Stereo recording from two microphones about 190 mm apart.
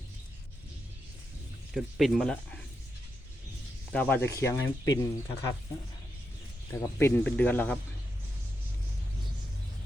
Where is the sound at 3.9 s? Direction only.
5° left (ahead or behind).